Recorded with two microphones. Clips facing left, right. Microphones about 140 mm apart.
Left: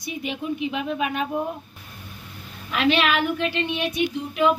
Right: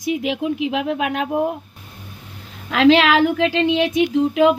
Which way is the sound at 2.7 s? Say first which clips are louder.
Right 8 dB; 90° right.